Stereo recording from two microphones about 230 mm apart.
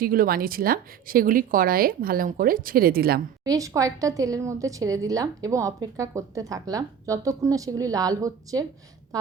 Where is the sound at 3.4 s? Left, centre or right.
Centre.